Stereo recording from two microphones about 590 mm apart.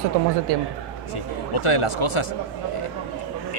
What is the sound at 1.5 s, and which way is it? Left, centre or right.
Speech, left.